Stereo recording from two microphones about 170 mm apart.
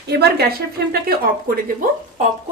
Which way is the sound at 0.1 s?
70° right (ahead or behind).